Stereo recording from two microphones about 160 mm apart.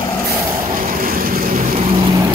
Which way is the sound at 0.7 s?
65° right (ahead or behind).